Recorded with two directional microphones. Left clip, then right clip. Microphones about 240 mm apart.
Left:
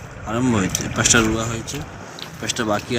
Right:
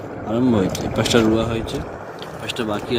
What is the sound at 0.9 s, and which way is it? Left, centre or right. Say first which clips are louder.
Speech: left 1 dB; centre.